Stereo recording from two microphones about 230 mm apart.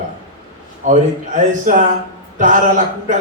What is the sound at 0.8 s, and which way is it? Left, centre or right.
Speech, right.